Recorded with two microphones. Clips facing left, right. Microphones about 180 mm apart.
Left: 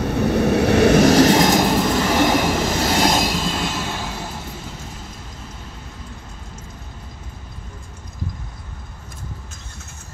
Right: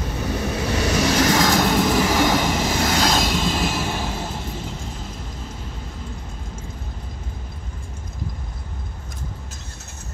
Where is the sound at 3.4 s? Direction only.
5° right (ahead or behind).